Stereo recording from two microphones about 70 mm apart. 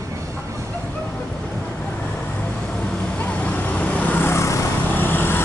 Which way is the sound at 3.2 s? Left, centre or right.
Left.